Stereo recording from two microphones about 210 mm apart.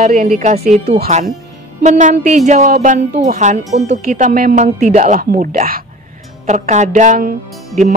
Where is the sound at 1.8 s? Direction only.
35° right (ahead or behind).